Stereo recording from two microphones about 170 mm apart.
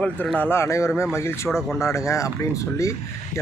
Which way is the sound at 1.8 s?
15° left (ahead or behind).